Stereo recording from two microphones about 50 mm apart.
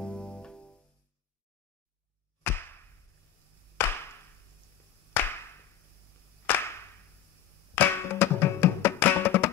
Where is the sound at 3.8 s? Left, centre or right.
Left.